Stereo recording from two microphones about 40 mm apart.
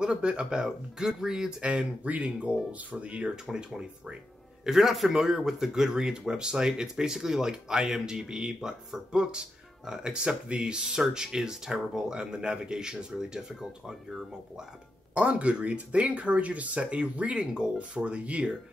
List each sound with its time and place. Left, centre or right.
0.0 s speech: right
1.6 s speech: right
4.6 s speech: centre
15.1 s speech: right